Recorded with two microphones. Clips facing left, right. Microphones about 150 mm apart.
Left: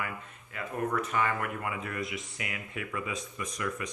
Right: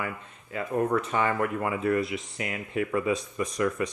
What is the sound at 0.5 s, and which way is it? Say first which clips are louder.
Speech: right 6 dB; 30° right (ahead or behind).